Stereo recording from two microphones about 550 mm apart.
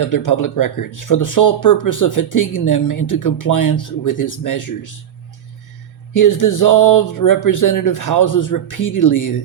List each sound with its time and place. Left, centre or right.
0.0 s speech: left
6.1 s speech: left